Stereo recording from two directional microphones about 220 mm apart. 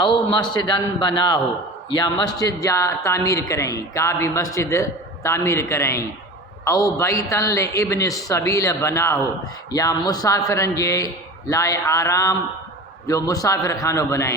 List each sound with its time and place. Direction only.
0.0 s a man's voice: 25° left (ahead or behind)